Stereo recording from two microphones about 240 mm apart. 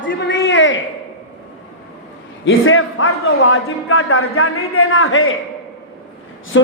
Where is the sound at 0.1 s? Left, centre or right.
Left.